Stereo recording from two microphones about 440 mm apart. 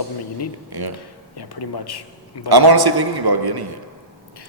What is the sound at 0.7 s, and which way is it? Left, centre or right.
Speech, right.